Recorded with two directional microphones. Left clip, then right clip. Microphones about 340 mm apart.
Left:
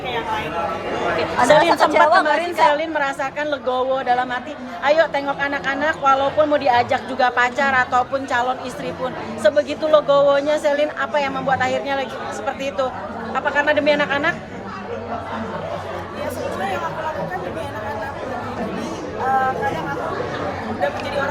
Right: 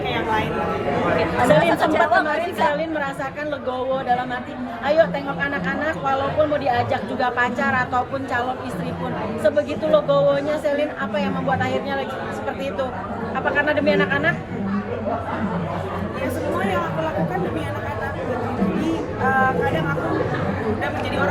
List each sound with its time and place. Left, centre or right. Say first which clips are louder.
1.4 s a woman's voice: left 4 dB; centre
13.3 s speech: left 2 dB; centre